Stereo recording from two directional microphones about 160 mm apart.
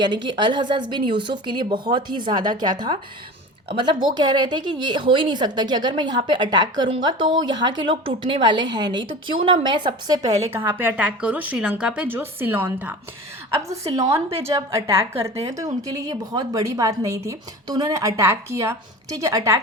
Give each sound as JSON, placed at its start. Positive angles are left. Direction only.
{"t": 0.0, "sound": "a woman's voice", "side_deg": -30}
{"t": 4.0, "sound": "a woman's voice", "side_deg": -25}
{"t": 10.5, "sound": "a woman's voice", "side_deg": -15}
{"t": 14.3, "sound": "a woman's voice", "side_deg": -20}